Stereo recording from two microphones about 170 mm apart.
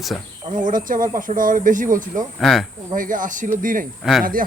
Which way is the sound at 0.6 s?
50° right (ahead or behind).